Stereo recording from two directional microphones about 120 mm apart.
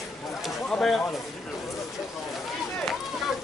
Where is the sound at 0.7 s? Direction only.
5° left (ahead or behind).